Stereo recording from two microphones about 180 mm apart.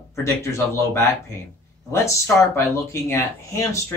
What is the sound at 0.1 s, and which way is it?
Speech, 15° left (ahead or behind).